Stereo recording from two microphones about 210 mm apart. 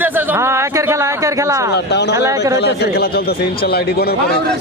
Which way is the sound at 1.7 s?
55° left (ahead or behind).